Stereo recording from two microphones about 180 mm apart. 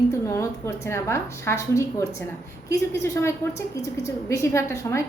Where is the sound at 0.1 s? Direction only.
15° left (ahead or behind).